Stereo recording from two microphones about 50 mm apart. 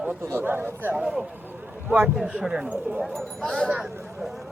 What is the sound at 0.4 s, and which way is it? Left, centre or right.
Speech, right.